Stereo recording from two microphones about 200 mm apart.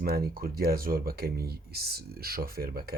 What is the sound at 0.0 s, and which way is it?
Speech, 50° right (ahead or behind).